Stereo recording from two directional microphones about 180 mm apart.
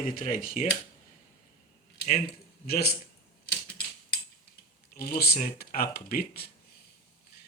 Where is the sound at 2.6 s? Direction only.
60° left (ahead or behind).